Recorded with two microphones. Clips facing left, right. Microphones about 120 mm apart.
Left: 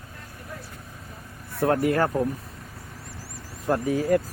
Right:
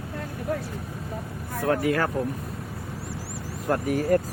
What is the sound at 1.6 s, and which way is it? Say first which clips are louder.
Speech: left 2 dB; 50° left (ahead or behind).